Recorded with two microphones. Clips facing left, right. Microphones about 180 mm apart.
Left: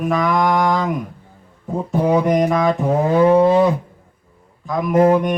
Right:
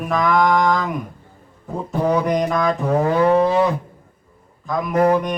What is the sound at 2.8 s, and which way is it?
Livestock, 20° left (ahead or behind).